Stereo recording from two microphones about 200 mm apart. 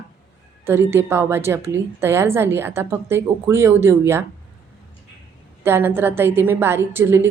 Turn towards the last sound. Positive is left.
turn(degrees=-10)  # may be behind; listen again after turning